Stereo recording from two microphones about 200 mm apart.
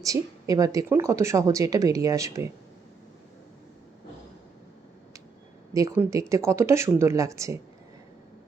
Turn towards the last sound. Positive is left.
turn(degrees=-15)  # may be behind; listen again after turning